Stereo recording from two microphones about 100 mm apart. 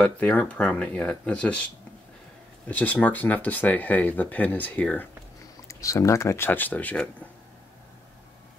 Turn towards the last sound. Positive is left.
turn(degrees=15)  # may be behind; listen again after turning